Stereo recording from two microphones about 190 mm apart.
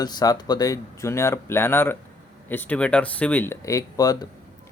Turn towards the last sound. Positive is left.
turn(degrees=20)  # may be behind; listen again after turning